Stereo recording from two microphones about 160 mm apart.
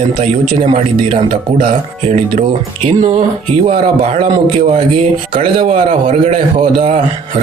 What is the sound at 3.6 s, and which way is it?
Speech, 40° right (ahead or behind).